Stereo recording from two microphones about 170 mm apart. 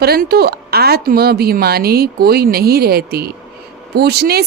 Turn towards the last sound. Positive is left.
turn(degrees=-70)  # may be behind; listen again after turning